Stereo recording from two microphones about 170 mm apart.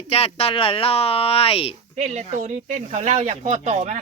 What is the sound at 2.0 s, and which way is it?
Speech, 40° right (ahead or behind).